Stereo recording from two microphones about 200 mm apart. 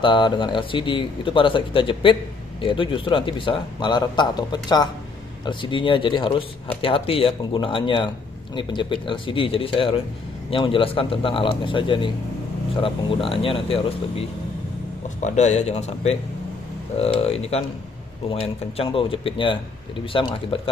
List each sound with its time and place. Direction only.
0.0 s a man's voice: 25° left (ahead or behind)